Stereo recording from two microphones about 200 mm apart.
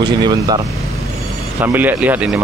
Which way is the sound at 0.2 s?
20° right (ahead or behind).